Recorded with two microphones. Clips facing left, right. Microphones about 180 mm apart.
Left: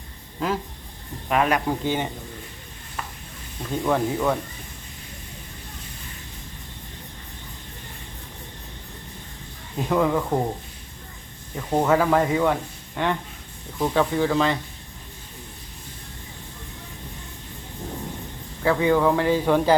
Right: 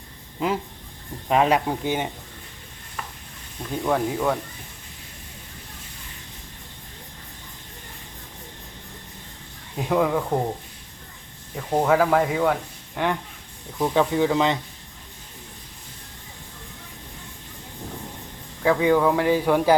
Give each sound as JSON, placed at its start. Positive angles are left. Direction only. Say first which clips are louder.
{"t": 0.3, "sound": "speech", "louder": "right 1 dB", "side_deg": -15}
{"t": 1.3, "sound": "speech", "louder": "right 2 dB", "side_deg": -25}
{"t": 1.6, "sound": "speech", "louder": "left 1 dB", "side_deg": -15}
{"t": 3.7, "sound": "speech", "louder": "left 1 dB", "side_deg": 0}
{"t": 9.7, "sound": "speech", "louder": "even", "side_deg": -10}
{"t": 11.5, "sound": "speech", "louder": "even", "side_deg": 0}
{"t": 18.6, "sound": "speech", "louder": "right 1 dB", "side_deg": -10}